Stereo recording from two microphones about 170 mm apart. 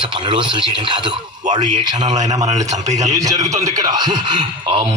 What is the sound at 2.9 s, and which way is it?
Speech, 45° right (ahead or behind).